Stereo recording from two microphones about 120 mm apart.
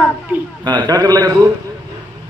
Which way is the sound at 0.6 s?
40° right (ahead or behind).